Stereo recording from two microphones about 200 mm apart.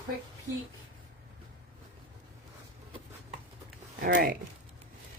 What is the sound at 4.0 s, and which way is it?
Speech, 50° right (ahead or behind).